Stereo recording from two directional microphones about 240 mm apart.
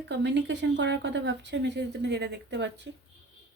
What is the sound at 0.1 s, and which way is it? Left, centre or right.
Speech, right.